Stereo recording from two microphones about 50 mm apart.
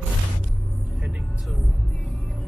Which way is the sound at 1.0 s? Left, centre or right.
Right.